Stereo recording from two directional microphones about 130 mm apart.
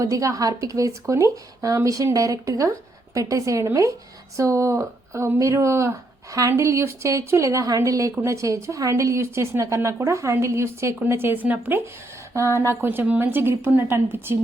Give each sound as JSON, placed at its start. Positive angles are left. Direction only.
{"t": 0.0, "sound": "a woman's voice", "side_deg": -25}